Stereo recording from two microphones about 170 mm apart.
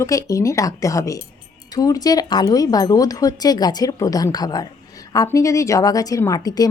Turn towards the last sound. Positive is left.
turn(degrees=20)  # may be behind; listen again after turning